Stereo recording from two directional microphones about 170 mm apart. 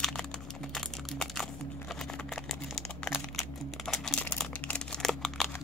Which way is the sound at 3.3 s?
Centre (ahead or behind).